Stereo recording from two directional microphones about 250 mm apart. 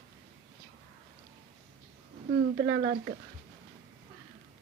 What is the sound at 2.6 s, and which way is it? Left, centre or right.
Speech, right.